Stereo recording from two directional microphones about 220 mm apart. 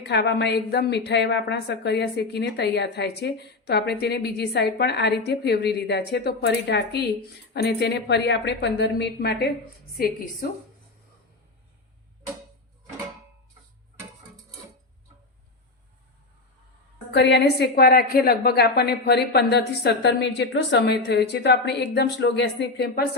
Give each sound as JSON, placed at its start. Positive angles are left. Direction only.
{"t": 0.0, "sound": "a woman's voice", "side_deg": 50}
{"t": 17.1, "sound": "a woman's voice", "side_deg": 50}